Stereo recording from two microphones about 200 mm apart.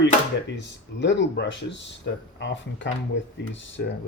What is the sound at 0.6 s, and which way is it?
Speech, 65° left (ahead or behind).